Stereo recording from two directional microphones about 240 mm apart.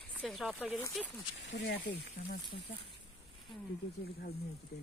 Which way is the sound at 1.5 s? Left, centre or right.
Left.